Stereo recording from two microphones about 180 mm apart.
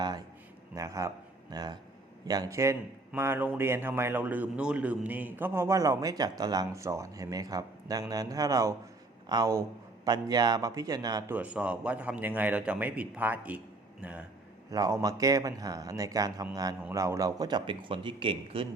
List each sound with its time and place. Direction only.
0.0 s a sound: 20° right (ahead or behind)
0.8 s a man's voice: 20° right (ahead or behind)
11.3 s a man's voice: 5° right (ahead or behind)
14.7 s speech: 15° right (ahead or behind)